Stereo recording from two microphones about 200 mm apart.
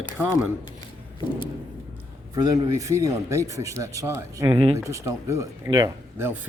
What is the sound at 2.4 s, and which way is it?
Speech, 20° right (ahead or behind).